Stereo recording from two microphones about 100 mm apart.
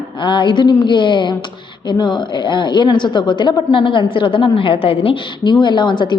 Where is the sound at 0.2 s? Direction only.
55° left (ahead or behind).